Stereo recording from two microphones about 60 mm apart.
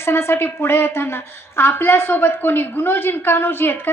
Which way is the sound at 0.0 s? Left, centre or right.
Left.